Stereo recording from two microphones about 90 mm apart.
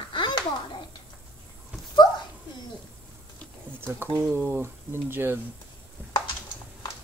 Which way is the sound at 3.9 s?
25° right (ahead or behind).